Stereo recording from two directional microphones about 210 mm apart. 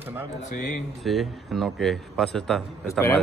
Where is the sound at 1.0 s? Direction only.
Centre (ahead or behind).